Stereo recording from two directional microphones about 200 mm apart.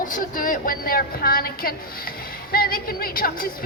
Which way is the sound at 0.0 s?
40° left (ahead or behind).